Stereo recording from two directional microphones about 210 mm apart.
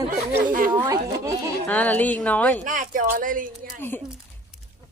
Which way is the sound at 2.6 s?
40° right (ahead or behind).